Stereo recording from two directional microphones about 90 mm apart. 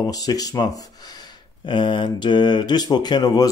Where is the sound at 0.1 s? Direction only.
45° left (ahead or behind).